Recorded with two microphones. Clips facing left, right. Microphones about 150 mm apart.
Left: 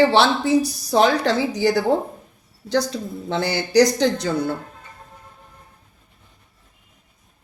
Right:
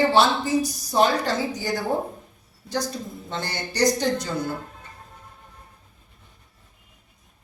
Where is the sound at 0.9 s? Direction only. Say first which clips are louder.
Left 4 dB; 80° left.